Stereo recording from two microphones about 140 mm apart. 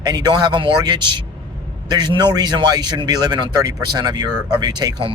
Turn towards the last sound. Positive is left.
turn(degrees=-35)  # may be behind; listen again after turning